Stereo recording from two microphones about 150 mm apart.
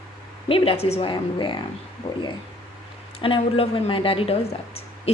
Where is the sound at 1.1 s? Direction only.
30° left (ahead or behind).